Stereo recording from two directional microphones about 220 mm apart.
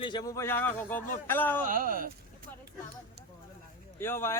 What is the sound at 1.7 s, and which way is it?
Speech, 40° right (ahead or behind).